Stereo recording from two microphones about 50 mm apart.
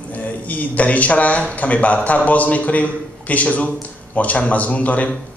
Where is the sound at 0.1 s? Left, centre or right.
Left.